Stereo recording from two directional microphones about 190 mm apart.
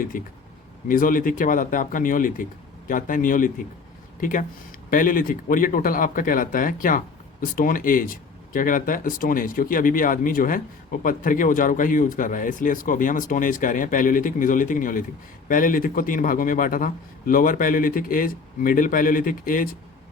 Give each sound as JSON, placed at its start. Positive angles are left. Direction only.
{"t": 0.1, "sound": "speech", "side_deg": 45}